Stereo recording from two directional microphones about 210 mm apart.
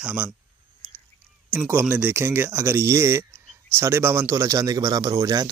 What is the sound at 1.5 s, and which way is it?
Speech, 10° right (ahead or behind).